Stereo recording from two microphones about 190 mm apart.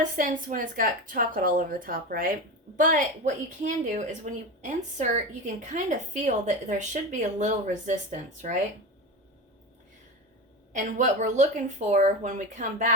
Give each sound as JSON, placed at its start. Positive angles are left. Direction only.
{"t": 0.0, "sound": "a woman's voice", "side_deg": -45}
{"t": 10.7, "sound": "a woman's voice", "side_deg": -40}